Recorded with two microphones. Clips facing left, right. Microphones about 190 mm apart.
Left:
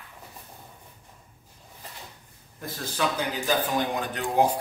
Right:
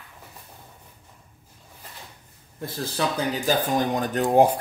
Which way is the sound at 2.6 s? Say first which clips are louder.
Right 2 dB; 35° right (ahead or behind).